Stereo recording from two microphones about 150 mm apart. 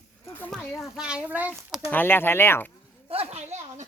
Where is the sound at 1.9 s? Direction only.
15° left (ahead or behind).